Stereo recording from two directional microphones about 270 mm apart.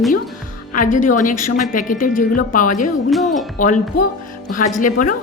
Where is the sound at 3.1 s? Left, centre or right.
Centre.